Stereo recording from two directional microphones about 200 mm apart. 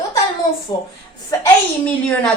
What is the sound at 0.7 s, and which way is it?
Speech, 20° left (ahead or behind).